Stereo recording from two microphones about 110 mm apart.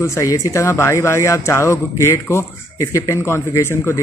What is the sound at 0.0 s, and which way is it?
Speech, 30° left (ahead or behind).